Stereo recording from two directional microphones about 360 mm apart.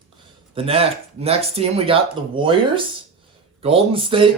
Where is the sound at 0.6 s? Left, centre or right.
Centre.